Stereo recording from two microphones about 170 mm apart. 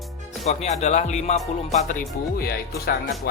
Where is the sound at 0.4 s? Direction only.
40° left (ahead or behind).